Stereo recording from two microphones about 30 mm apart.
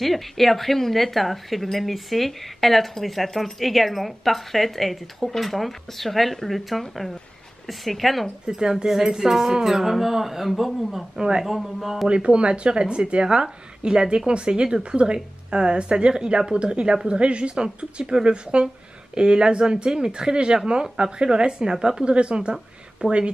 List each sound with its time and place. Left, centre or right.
0.0 s speech: centre
8.5 s speech: right; by 12.1 s centre
12.1 s a woman's voice: right; by 22.0 s centre
22.0 s a woman's voice: right